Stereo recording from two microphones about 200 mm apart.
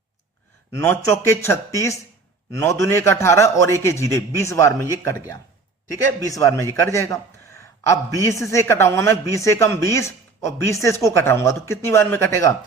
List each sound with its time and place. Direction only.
0.7 s a man's voice: 15° left (ahead or behind)
6.2 s a man's voice: 15° left (ahead or behind)